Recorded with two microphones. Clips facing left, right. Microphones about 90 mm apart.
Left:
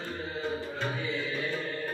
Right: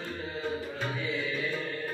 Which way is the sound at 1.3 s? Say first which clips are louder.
Even; 30° left (ahead or behind).